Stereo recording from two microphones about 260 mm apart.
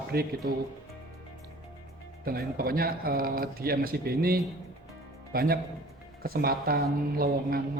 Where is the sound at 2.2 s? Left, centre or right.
Right.